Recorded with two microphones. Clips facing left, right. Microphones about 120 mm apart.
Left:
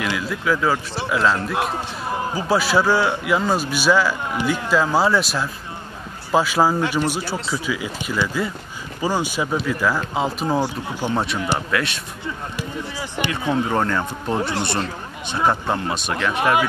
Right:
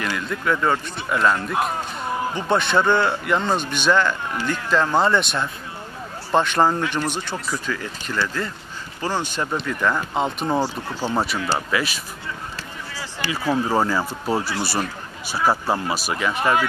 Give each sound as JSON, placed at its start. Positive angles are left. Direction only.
{"t": 0.2, "sound": "a man's voice", "side_deg": 5}
{"t": 10.6, "sound": "speech", "side_deg": 15}
{"t": 11.7, "sound": "a man's voice", "side_deg": 0}
{"t": 12.5, "sound": "a sound", "side_deg": 15}
{"t": 13.5, "sound": "a man's voice", "side_deg": -5}